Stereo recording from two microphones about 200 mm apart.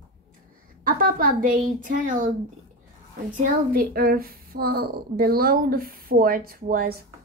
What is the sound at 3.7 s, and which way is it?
A woman's voice, 50° right (ahead or behind).